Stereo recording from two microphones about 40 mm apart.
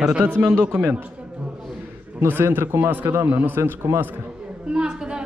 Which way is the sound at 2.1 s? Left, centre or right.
Right.